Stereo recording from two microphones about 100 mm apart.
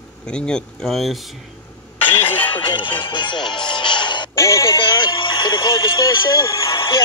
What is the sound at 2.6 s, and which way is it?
Speech, 55° left (ahead or behind).